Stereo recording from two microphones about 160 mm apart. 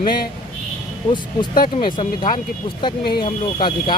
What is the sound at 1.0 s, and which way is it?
Speech, 25° left (ahead or behind).